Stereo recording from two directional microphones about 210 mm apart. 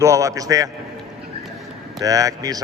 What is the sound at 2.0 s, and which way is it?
Speech, 15° right (ahead or behind).